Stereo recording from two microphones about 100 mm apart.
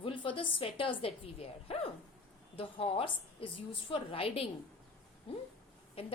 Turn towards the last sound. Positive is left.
turn(degrees=75)  # may be behind; listen again after turning